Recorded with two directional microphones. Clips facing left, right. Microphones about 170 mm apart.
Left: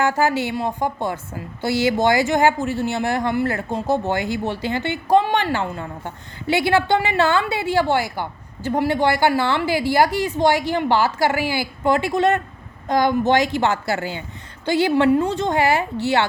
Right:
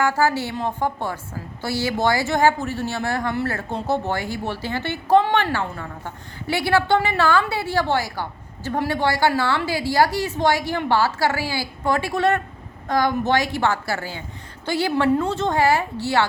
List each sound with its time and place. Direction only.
0.0 s a woman's voice: 20° left (ahead or behind)